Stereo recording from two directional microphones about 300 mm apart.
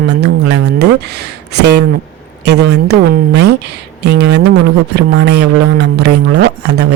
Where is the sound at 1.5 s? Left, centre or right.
Right.